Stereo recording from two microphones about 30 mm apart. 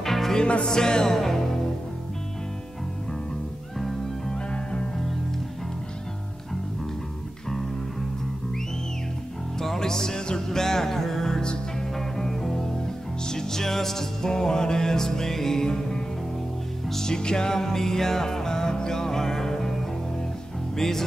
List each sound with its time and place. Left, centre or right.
0.0 s music: centre
0.7 s music: left
1.1 s music: centre
3.7 s music: centre
4.3 s music: left
9.6 s music: centre
20.7 s speech: centre